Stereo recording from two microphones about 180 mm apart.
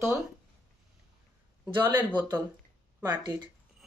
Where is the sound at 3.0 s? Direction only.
25° right (ahead or behind).